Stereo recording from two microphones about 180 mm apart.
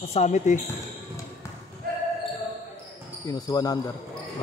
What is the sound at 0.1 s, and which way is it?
Speech, 40° left (ahead or behind).